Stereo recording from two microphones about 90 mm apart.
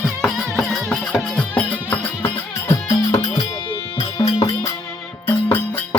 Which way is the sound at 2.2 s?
40° left (ahead or behind).